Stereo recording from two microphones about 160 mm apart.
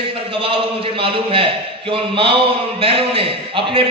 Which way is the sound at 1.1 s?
35° right (ahead or behind).